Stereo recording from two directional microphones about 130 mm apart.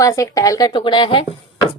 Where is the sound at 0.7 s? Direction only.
40° left (ahead or behind).